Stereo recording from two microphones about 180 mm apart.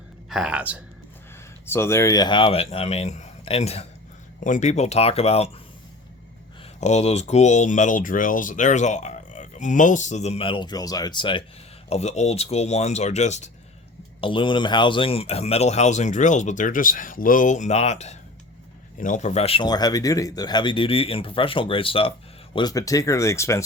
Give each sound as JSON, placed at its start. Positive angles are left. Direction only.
{"t": 0.3, "sound": "speech", "side_deg": -5}
{"t": 1.6, "sound": "speech", "side_deg": 15}
{"t": 6.7, "sound": "speech", "side_deg": 40}
{"t": 11.9, "sound": "speech", "side_deg": 35}
{"t": 14.2, "sound": "speech", "side_deg": 30}